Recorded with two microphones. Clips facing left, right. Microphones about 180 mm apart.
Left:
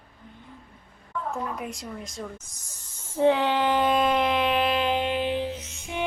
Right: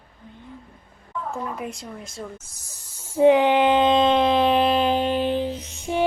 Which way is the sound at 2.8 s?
10° right (ahead or behind).